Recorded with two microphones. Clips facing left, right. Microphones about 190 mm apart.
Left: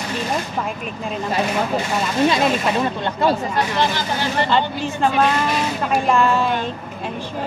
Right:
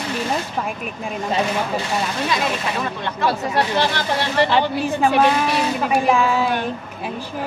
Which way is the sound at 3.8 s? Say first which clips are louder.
Even; 70° right (ahead or behind).